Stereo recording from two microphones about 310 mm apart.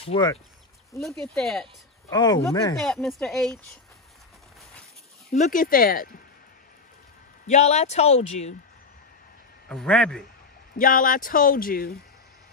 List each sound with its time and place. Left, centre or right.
0.0 s speech: centre
0.9 s speech: centre
2.1 s speech: centre
2.8 s speech: centre
5.3 s speech: left
7.4 s speech: left
9.7 s speech: centre
10.8 s speech: left